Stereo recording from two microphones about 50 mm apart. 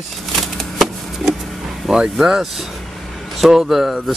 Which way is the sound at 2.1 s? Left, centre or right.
Centre.